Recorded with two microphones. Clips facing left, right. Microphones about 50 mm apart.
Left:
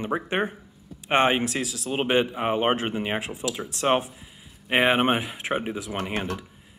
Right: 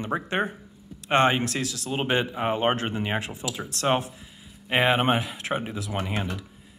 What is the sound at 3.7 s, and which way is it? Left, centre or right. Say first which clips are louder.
Speech: left 1 dB; centre.